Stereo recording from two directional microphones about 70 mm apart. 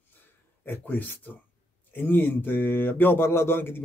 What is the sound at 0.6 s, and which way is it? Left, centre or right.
Speech, left.